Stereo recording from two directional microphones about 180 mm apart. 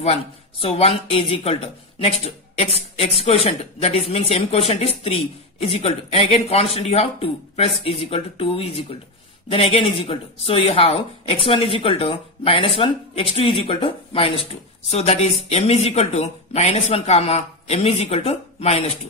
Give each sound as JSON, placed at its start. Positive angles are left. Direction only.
{"t": 0.0, "sound": "speech", "side_deg": 35}